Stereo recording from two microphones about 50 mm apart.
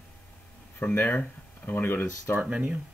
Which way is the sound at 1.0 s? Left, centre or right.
Left.